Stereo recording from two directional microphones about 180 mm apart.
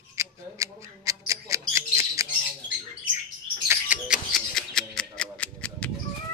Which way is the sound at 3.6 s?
5° right (ahead or behind).